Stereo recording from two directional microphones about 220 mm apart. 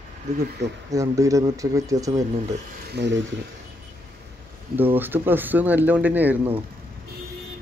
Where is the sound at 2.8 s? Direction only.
50° right (ahead or behind).